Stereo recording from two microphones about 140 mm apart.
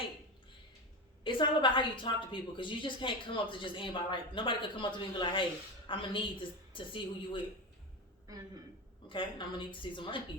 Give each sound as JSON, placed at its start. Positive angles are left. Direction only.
{"t": 1.2, "sound": "a woman's voice", "side_deg": 35}
{"t": 9.0, "sound": "a woman's voice", "side_deg": 35}